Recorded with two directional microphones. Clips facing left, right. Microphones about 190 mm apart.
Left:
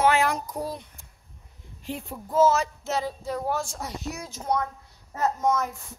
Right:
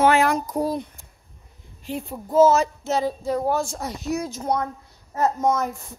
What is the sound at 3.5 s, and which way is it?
Speech, 25° right (ahead or behind).